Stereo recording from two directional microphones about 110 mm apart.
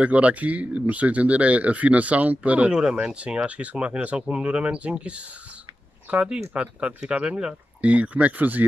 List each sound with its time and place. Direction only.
0.0 s speech: 10° right (ahead or behind)